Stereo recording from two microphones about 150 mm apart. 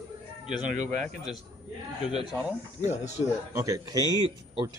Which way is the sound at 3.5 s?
20° right (ahead or behind).